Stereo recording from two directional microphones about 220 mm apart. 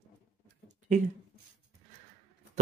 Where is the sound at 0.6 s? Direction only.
35° right (ahead or behind).